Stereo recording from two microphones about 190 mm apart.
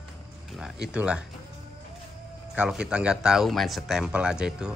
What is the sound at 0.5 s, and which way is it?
Speech, 5° right (ahead or behind).